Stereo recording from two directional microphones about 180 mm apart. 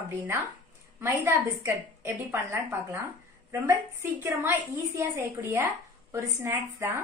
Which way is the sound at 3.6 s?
15° right (ahead or behind).